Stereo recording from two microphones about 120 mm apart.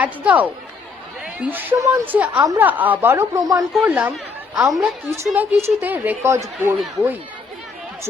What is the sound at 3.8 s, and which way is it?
Speech, 15° right (ahead or behind).